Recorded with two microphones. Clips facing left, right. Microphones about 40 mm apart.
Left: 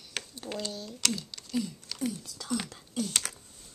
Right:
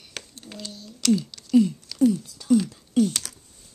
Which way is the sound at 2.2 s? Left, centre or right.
Left.